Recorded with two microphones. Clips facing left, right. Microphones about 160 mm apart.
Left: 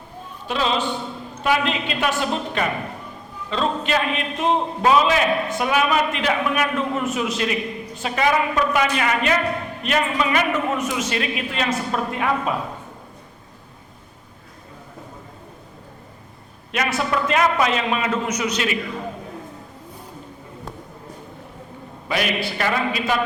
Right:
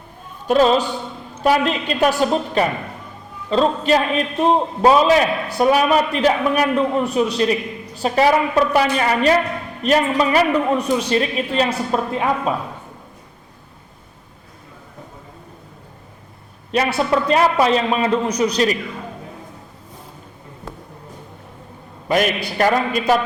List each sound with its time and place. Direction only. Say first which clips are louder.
0.4 s a woman's voice: right 8 dB; 45° right (ahead or behind)
16.7 s a man's voice: right 5 dB; 30° right (ahead or behind)
22.1 s a woman's voice: right 5 dB; 45° right (ahead or behind)